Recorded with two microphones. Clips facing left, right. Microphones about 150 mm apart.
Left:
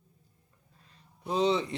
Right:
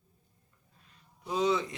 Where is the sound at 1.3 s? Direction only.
30° left (ahead or behind).